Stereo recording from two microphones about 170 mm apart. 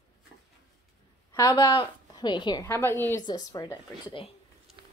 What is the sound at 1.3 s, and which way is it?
A woman's voice, 25° left (ahead or behind).